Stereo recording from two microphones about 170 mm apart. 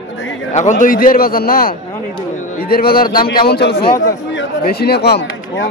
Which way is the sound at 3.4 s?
70° left (ahead or behind).